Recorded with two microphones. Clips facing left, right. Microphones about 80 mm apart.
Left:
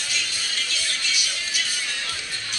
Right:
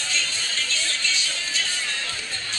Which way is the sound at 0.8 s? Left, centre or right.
Right.